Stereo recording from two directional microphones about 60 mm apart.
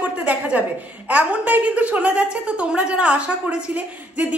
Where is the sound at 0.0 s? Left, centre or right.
Right.